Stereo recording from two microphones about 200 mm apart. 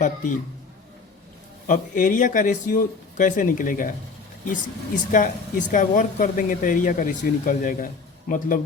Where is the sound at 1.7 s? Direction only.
40° left (ahead or behind).